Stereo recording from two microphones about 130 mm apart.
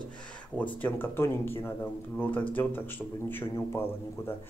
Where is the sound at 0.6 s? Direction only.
10° left (ahead or behind).